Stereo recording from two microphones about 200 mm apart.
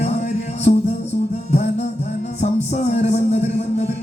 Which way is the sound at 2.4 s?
35° left (ahead or behind).